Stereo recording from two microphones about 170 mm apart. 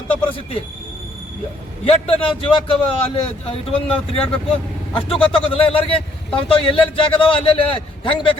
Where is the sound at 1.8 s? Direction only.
35° left (ahead or behind).